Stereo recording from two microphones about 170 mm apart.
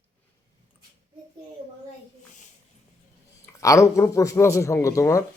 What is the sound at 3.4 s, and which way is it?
A man's voice, 20° left (ahead or behind).